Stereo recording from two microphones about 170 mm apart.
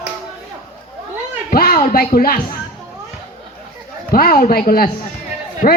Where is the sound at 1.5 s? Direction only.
60° left (ahead or behind).